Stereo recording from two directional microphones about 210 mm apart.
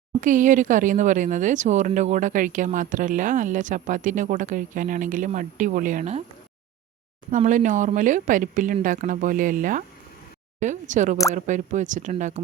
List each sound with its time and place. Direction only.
0.2 s speech: 40° right (ahead or behind)
7.3 s speech: 35° right (ahead or behind)